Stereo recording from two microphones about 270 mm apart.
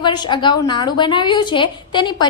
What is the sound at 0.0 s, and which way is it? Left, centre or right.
A woman's voice, centre.